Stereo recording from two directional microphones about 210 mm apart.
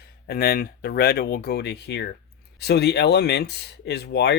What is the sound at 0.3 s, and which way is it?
Speech, 45° left (ahead or behind).